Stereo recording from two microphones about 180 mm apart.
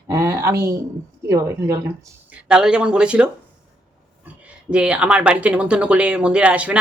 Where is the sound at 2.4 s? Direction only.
5° right (ahead or behind).